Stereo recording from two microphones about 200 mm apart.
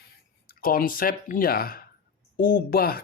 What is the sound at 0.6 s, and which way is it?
Speech, 45° left (ahead or behind).